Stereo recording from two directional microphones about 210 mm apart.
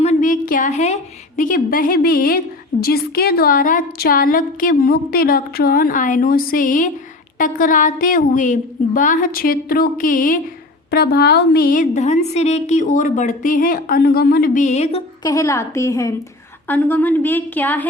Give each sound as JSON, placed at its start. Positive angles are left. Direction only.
{"t": 0.0, "sound": "a sound", "side_deg": 35}
{"t": 1.4, "sound": "a woman's voice", "side_deg": 40}
{"t": 15.2, "sound": "a woman's voice", "side_deg": 15}